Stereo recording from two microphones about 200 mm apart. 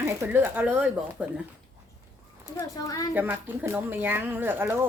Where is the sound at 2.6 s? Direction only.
20° left (ahead or behind).